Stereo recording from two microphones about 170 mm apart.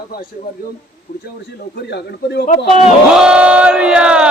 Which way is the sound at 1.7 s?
80° left.